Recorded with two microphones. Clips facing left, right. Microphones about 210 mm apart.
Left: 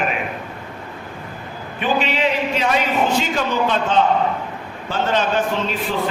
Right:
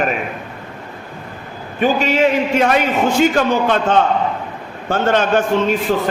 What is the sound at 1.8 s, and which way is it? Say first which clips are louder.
A man's voice: right 5 dB; 45° right (ahead or behind).